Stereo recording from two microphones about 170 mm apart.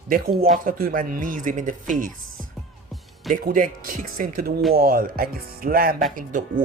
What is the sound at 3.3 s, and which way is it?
Speech, 50° right (ahead or behind).